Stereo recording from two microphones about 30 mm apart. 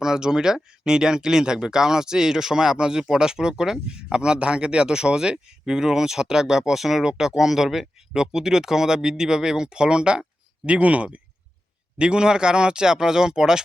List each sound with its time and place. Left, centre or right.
0.0 s speech: right
6.7 s speech: centre
7.0 s speech: right
10.7 s speech: right
11.9 s speech: right